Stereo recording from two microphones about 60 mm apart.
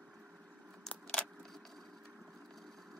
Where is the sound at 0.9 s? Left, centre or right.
Centre.